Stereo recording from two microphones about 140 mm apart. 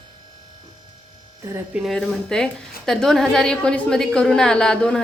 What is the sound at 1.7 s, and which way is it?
A woman's voice, centre (ahead or behind).